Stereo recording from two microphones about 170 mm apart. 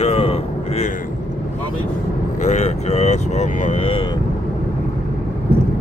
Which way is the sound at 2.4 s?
40° left (ahead or behind).